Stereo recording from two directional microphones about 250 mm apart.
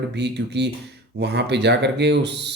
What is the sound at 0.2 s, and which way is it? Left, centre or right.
Speech, right.